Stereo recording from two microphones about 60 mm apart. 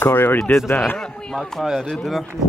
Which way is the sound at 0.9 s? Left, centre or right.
Centre.